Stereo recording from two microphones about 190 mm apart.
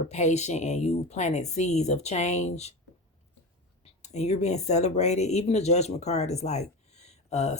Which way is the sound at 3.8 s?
35° left (ahead or behind).